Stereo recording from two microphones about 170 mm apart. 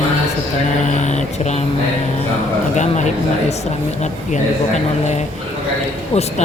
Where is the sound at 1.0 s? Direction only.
40° left (ahead or behind).